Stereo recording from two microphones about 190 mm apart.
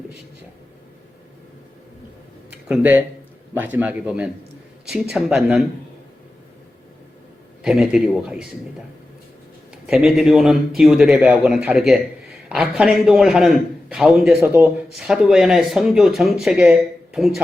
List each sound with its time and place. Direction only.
2.5 s a sound: 5° right (ahead or behind)
3.5 s speech: 10° right (ahead or behind)
7.6 s speech: centre (ahead or behind)
9.8 s speech: 5° right (ahead or behind)